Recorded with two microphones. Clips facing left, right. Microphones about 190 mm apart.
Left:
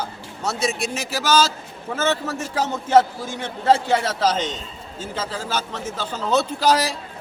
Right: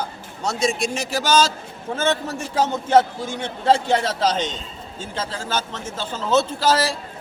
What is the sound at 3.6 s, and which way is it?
A man's voice, 5° left (ahead or behind).